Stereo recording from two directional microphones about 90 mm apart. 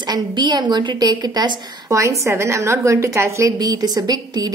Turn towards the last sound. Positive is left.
turn(degrees=-45)  # may be behind; listen again after turning